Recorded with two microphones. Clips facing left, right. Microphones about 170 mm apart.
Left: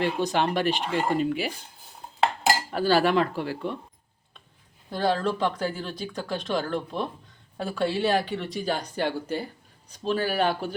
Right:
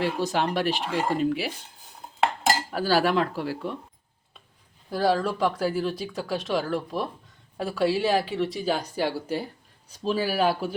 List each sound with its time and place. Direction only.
0.0 s speech: centre (ahead or behind)
2.6 s speech: 5° right (ahead or behind)
4.9 s speech: 5° right (ahead or behind)